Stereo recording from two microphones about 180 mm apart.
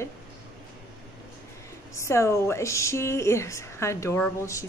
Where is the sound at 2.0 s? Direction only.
15° left (ahead or behind).